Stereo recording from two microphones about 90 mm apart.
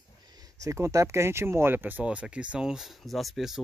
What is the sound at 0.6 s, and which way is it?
Speech, 35° right (ahead or behind).